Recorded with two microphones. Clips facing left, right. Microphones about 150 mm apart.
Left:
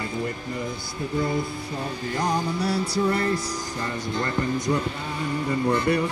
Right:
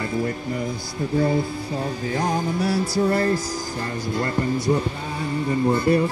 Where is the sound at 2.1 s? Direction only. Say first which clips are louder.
Right 1 dB; 50° right (ahead or behind).